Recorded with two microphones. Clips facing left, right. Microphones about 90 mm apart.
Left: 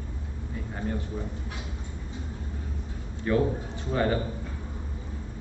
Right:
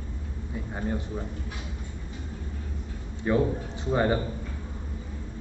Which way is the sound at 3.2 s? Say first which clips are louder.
Right 1 dB; 20° right (ahead or behind).